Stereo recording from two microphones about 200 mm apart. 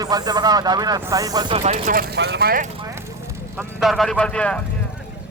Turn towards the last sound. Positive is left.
turn(degrees=5)  # may be behind; listen again after turning